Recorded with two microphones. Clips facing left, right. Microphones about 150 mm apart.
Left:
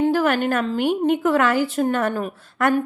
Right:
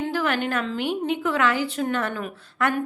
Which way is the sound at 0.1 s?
45° left (ahead or behind).